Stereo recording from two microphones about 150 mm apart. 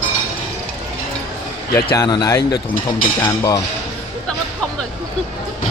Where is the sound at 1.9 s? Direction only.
25° left (ahead or behind).